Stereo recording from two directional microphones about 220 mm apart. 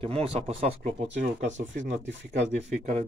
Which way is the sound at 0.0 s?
25° right (ahead or behind).